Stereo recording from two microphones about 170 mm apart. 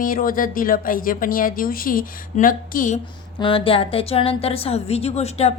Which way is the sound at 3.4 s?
30° left (ahead or behind).